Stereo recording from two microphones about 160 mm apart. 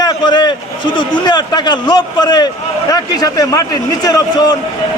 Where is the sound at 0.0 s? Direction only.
25° left (ahead or behind).